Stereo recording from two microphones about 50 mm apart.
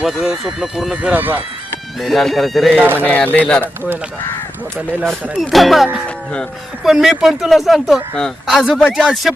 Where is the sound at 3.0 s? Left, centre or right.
Left.